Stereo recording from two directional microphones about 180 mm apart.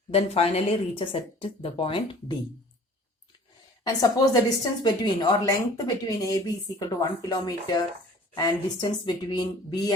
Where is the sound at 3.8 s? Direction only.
20° left (ahead or behind).